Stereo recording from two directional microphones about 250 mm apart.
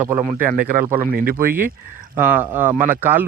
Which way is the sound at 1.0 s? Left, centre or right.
Right.